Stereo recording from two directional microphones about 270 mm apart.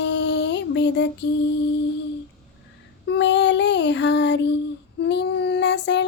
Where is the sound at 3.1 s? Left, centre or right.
Left.